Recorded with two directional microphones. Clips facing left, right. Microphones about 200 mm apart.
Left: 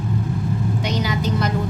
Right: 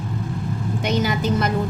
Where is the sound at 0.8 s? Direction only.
50° right (ahead or behind).